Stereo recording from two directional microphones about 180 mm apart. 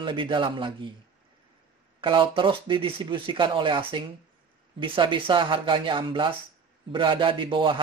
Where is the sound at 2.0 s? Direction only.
25° right (ahead or behind).